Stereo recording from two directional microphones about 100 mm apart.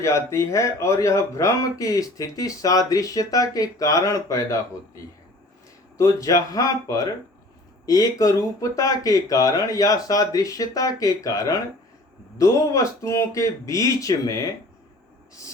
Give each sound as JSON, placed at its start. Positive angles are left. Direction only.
{"t": 0.0, "sound": "speech", "side_deg": 30}